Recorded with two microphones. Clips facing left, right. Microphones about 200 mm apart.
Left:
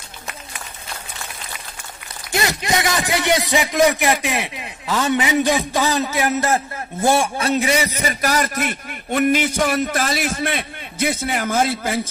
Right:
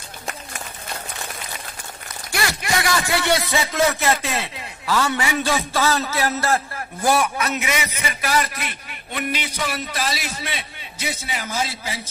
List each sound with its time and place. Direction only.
2.3 s a man's voice: 20° left (ahead or behind); by 12.1 s 55° left (ahead or behind)